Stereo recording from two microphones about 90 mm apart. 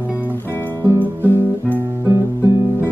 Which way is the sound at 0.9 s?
20° right (ahead or behind).